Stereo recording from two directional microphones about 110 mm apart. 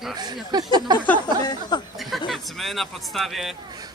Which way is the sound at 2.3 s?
Centre (ahead or behind).